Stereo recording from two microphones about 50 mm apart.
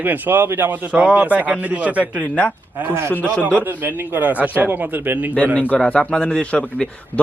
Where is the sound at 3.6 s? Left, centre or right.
Right.